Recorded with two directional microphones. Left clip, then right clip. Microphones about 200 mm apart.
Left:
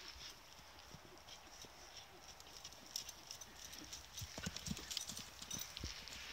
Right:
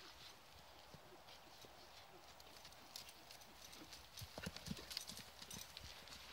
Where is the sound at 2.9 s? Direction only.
25° right (ahead or behind).